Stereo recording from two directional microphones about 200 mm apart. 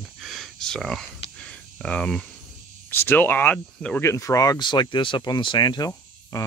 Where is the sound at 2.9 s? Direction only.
10° left (ahead or behind).